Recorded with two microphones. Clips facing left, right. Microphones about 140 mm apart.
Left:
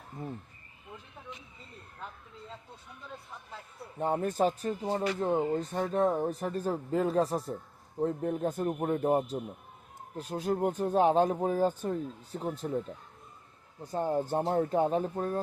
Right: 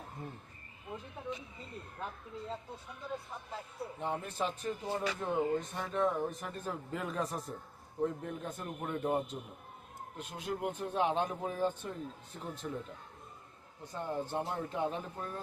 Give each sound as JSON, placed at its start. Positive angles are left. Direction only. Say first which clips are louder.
{"t": 4.0, "sound": "speech", "louder": "left 9 dB", "side_deg": 45}
{"t": 4.9, "sound": "speech", "louder": "left 7 dB", "side_deg": 30}
{"t": 13.9, "sound": "speech", "louder": "left 7 dB", "side_deg": 40}